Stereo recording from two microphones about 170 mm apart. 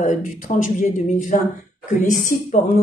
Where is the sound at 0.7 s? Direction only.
45° left (ahead or behind).